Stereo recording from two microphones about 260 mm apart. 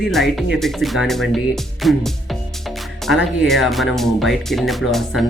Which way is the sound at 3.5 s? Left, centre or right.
Centre.